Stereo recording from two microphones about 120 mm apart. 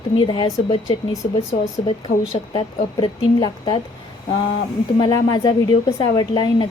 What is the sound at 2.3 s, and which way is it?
A woman's voice, 45° left (ahead or behind).